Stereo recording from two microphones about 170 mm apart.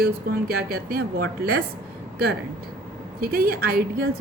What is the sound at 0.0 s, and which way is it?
Speech, 65° right (ahead or behind).